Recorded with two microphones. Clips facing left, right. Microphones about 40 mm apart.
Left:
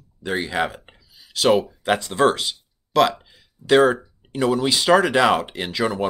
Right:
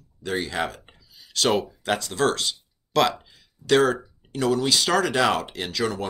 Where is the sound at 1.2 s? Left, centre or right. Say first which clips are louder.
Left 5 dB; centre.